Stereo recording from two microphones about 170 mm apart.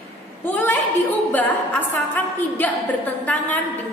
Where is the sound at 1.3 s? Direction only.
10° left (ahead or behind).